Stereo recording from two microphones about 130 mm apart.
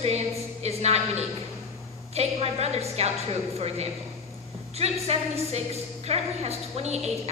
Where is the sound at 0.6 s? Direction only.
55° right (ahead or behind).